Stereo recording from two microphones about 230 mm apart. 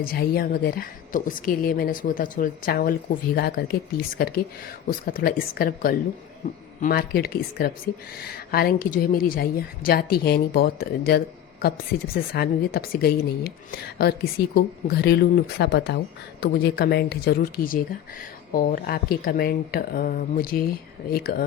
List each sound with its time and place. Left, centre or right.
0.0 s a woman's voice: left